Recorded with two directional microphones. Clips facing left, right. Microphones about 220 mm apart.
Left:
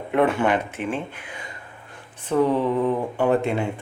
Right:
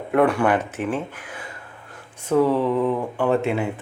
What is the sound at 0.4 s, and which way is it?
Speech, 15° left (ahead or behind).